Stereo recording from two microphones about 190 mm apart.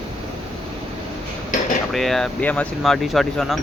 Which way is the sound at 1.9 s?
Centre (ahead or behind).